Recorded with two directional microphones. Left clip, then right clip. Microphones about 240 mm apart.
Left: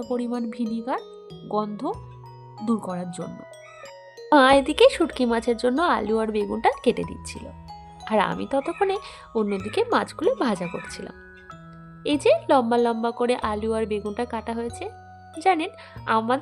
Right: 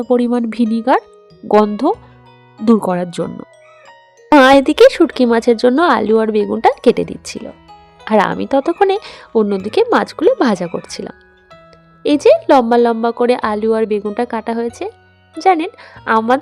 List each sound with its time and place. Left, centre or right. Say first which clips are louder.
0.1 s a woman's voice: right 14 dB; right